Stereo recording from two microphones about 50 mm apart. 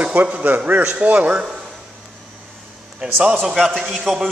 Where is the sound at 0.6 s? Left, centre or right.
Right.